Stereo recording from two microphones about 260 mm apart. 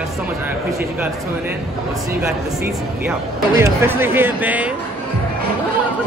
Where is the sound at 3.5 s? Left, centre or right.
Centre.